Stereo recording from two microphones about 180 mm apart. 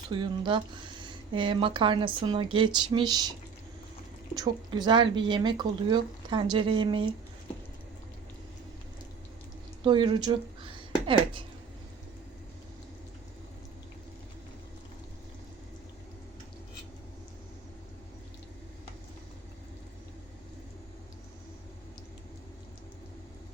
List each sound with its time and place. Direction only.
0.1 s speech: 25° right (ahead or behind)
4.4 s speech: 25° right (ahead or behind)
9.8 s speech: 25° right (ahead or behind)